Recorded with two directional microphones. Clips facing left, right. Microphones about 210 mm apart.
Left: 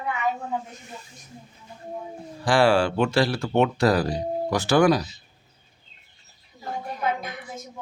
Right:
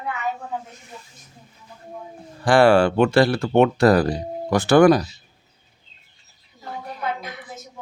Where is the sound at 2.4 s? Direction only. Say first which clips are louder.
Right 5 dB; 55° right (ahead or behind).